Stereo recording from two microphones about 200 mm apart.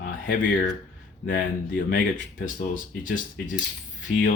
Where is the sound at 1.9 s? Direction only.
40° left (ahead or behind).